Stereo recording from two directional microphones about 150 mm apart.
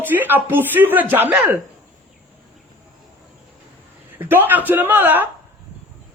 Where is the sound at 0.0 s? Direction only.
10° right (ahead or behind).